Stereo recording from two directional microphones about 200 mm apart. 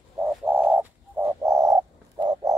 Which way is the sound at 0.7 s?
10° right (ahead or behind).